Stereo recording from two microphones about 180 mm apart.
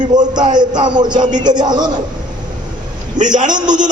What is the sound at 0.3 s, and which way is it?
Music, 25° right (ahead or behind).